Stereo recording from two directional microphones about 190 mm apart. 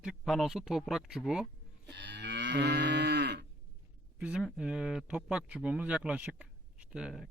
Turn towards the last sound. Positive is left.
turn(degrees=-5)  # may be behind; listen again after turning